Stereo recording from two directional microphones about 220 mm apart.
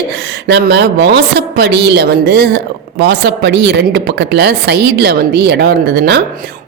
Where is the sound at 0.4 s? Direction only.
50° right (ahead or behind).